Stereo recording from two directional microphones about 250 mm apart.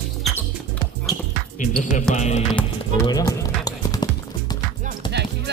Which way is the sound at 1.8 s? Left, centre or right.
Left.